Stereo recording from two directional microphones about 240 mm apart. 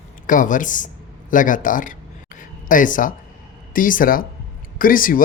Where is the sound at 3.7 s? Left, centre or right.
Left.